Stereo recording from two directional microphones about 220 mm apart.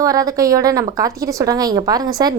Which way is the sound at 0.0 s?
15° right (ahead or behind).